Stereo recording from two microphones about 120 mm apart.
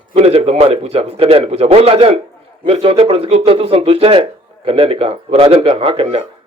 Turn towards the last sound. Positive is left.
turn(degrees=-55)  # may be behind; listen again after turning